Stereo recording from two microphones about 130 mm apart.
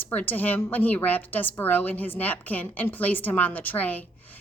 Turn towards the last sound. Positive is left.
turn(degrees=15)  # may be behind; listen again after turning